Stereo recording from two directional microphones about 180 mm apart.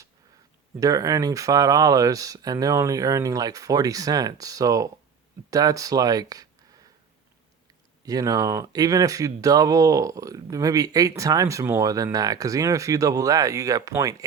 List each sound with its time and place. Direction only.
0.8 s speech: 20° right (ahead or behind)
8.0 s speech: 20° right (ahead or behind)